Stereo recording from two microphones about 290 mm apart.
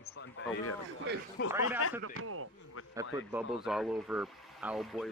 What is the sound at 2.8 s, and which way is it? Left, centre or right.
Speech, left.